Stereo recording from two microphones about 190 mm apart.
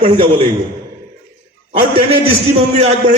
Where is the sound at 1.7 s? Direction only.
30° right (ahead or behind).